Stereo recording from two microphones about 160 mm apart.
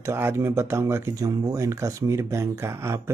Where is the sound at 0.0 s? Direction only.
15° right (ahead or behind).